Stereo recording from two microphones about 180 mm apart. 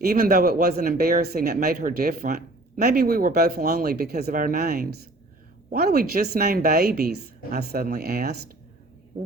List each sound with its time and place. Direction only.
0.0 s speech: 55° right (ahead or behind)